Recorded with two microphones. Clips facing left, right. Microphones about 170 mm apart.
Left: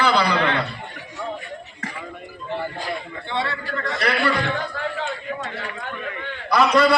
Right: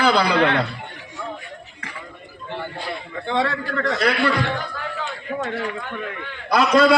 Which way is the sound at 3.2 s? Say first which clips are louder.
Right 5 dB; 90° right.